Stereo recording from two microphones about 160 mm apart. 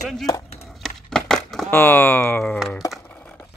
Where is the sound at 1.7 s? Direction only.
15° left (ahead or behind).